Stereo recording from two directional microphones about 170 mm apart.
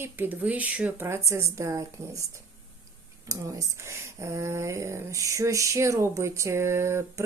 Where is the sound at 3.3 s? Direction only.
20° right (ahead or behind).